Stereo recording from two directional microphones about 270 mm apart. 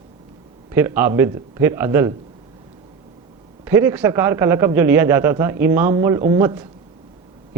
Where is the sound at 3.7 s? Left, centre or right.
Centre.